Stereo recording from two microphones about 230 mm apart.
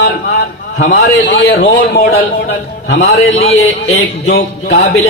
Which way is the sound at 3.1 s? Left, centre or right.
Left.